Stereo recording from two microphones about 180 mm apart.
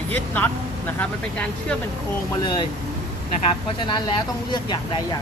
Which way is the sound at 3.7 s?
25° left (ahead or behind).